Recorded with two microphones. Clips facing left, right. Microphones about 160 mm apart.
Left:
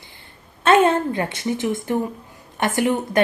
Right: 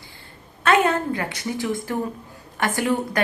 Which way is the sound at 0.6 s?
25° left (ahead or behind).